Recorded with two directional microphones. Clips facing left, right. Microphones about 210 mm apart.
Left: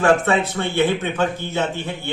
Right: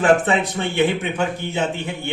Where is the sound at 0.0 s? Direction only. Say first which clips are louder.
Even; 20° right (ahead or behind).